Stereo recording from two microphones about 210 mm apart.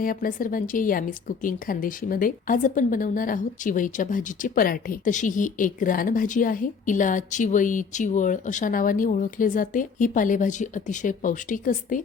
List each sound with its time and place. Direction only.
0.0 s a woman's voice: 40° left (ahead or behind)